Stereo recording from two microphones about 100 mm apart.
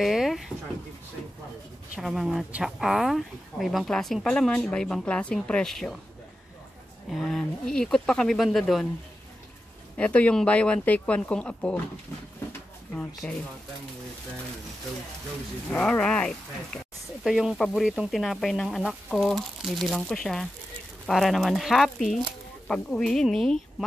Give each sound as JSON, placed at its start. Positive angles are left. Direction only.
{"t": 0.0, "sound": "a sound", "side_deg": 0}
{"t": 2.0, "sound": "speech", "side_deg": -5}
{"t": 7.1, "sound": "speech", "side_deg": 0}
{"t": 9.9, "sound": "speech", "side_deg": 15}
{"t": 13.2, "sound": "speech", "side_deg": 10}
{"t": 15.7, "sound": "speech", "side_deg": 10}